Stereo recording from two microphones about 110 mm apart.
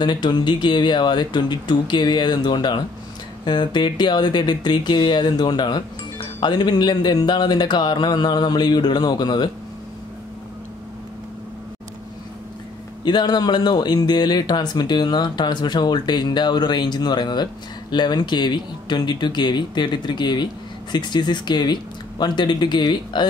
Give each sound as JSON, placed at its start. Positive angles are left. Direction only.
{"t": 0.0, "sound": "speech", "side_deg": 45}
{"t": 13.0, "sound": "speech", "side_deg": 40}